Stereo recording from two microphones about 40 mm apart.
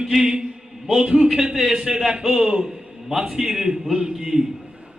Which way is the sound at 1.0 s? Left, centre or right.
Right.